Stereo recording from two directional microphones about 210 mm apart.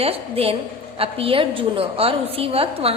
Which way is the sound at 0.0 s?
30° right (ahead or behind).